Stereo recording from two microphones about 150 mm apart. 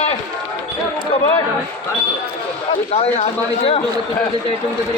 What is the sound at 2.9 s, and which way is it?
Speech, 45° left (ahead or behind).